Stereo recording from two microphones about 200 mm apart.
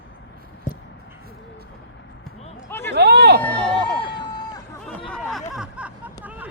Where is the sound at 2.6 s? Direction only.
10° left (ahead or behind).